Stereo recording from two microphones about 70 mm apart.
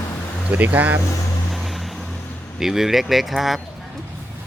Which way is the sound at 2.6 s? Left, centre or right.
Centre.